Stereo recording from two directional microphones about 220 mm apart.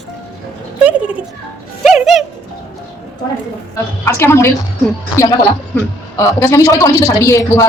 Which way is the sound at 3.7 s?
10° left (ahead or behind).